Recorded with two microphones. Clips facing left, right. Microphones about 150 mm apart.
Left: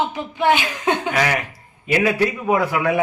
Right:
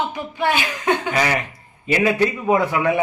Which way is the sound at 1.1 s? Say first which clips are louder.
Even; centre (ahead or behind).